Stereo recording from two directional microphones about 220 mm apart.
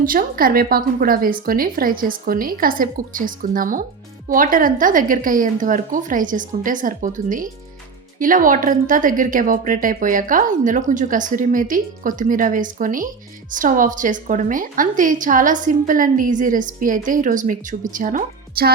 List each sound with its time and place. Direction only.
0.0 s a woman's voice: 40° right (ahead or behind)